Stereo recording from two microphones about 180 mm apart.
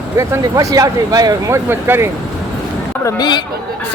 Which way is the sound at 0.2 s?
20° right (ahead or behind).